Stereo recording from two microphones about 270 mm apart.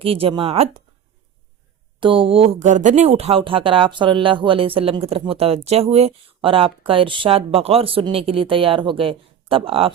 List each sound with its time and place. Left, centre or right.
0.0 s speech: centre
2.0 s speech: centre